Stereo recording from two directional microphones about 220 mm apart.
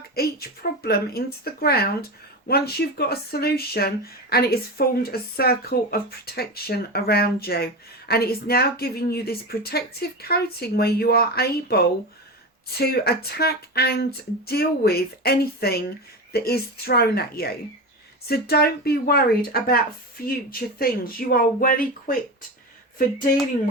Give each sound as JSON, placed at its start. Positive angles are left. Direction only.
{"t": 0.2, "sound": "speech", "side_deg": 45}